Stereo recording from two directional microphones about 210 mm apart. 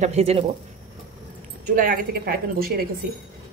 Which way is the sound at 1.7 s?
40° right (ahead or behind).